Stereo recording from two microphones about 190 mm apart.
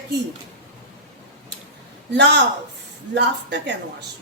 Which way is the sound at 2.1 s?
65° right (ahead or behind).